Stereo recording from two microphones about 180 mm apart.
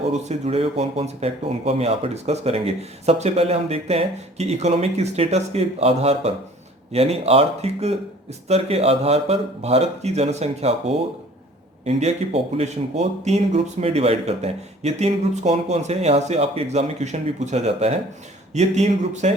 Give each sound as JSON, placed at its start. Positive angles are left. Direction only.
{"t": 0.1, "sound": "speech", "side_deg": -35}
{"t": 11.9, "sound": "speech", "side_deg": -35}